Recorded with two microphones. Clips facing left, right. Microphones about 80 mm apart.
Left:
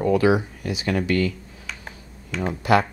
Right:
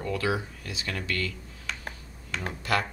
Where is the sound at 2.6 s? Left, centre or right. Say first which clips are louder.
Left 9 dB; centre.